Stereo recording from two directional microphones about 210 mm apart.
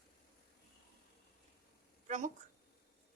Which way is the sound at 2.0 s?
35° right (ahead or behind).